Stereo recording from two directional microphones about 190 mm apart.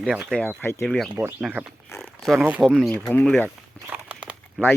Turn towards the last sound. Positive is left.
turn(degrees=-5)  # may be behind; listen again after turning